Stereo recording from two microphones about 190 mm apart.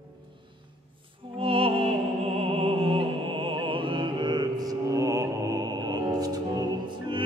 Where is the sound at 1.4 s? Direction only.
30° right (ahead or behind).